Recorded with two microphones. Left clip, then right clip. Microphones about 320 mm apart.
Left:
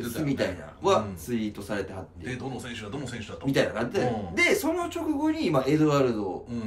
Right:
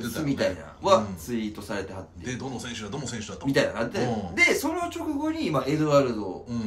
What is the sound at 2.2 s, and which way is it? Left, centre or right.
Speech, centre.